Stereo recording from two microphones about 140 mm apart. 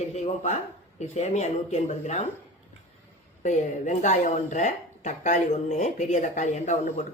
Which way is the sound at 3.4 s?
60° left (ahead or behind).